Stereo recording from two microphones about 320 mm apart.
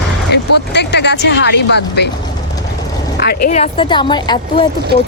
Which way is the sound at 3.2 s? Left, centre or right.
Left.